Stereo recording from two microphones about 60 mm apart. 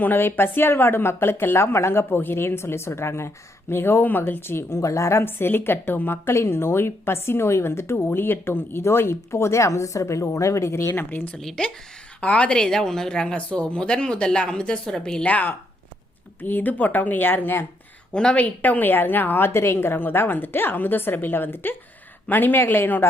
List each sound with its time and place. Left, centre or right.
0.0 s speech: left
5.2 s speech: left
11.3 s a woman's voice: centre
12.2 s a woman's voice: left
15.3 s speech: left
18.1 s a woman's voice: centre
18.3 s speech: left
19.5 s speech: left